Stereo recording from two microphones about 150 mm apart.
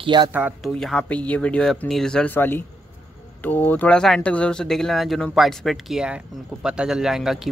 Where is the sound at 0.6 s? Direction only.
5° left (ahead or behind).